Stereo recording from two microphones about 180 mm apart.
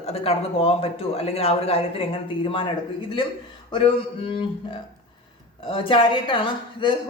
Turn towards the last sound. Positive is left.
turn(degrees=30)  # may be behind; listen again after turning